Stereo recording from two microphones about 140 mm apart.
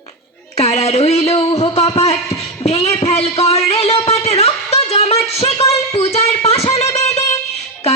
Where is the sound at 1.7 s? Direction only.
45° left (ahead or behind).